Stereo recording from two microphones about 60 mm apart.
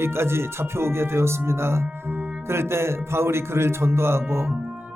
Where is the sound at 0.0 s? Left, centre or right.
Right.